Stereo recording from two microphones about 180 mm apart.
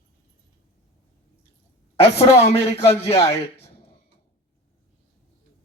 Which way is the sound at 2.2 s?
35° left (ahead or behind).